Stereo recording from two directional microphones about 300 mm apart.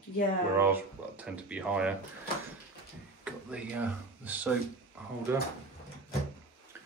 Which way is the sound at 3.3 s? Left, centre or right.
Centre.